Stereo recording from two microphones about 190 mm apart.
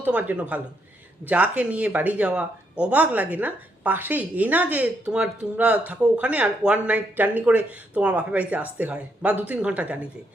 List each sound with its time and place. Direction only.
0.0 s speech: 10° right (ahead or behind)